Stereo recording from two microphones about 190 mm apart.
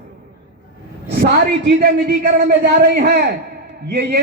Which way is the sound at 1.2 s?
55° right (ahead or behind).